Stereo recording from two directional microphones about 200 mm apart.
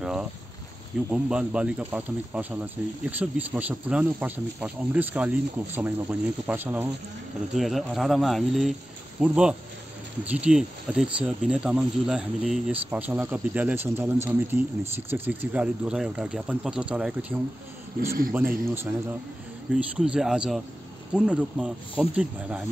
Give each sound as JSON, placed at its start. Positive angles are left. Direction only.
{"t": 0.0, "sound": "boat", "side_deg": -5}
{"t": 1.1, "sound": "speech", "side_deg": -5}